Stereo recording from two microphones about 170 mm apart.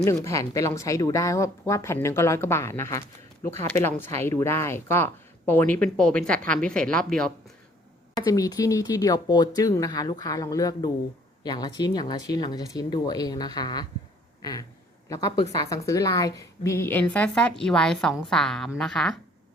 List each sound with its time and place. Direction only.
0.0 s speech: 15° left (ahead or behind)
8.2 s speech: 20° left (ahead or behind)
15.1 s speech: 20° left (ahead or behind); by 19.2 s centre (ahead or behind)